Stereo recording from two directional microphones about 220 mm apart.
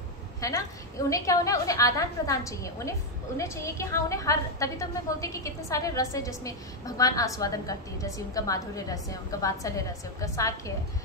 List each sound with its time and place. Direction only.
0.4 s a woman's voice: 15° left (ahead or behind)